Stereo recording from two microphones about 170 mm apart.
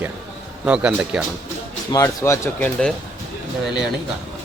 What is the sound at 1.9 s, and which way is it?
Speech, 15° left (ahead or behind).